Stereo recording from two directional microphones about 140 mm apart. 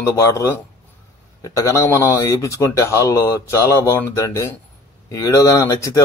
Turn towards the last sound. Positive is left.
turn(degrees=20)  # may be behind; listen again after turning